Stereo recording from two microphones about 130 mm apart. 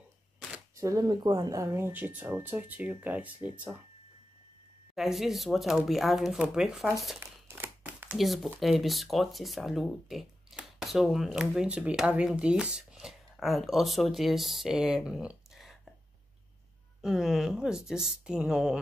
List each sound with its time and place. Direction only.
0.7 s speech: 25° right (ahead or behind)
4.9 s speech: centre (ahead or behind)
7.4 s crumpling: 20° right (ahead or behind)
8.2 s speech: centre (ahead or behind)
17.0 s speech: centre (ahead or behind)